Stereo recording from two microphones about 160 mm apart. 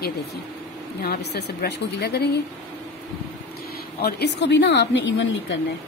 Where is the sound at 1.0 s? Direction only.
80° left.